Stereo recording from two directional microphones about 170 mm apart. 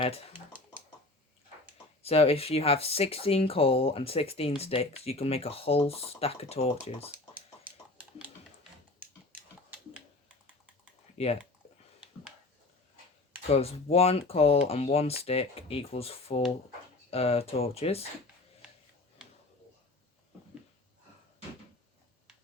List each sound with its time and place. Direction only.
0.0 s speech: 35° left (ahead or behind)
2.0 s speech: 35° left (ahead or behind)
11.2 s speech: 35° left (ahead or behind)
13.5 s speech: 35° left (ahead or behind)